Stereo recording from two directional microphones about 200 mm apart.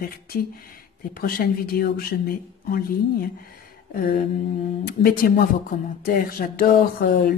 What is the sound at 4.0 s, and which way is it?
Speech, 50° left (ahead or behind).